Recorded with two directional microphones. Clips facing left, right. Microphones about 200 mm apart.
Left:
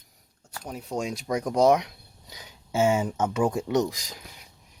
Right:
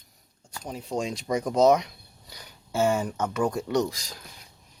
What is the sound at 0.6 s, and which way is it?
Speech, 5° left (ahead or behind).